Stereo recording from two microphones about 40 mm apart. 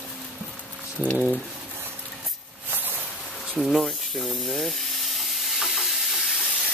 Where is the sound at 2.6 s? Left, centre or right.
Right.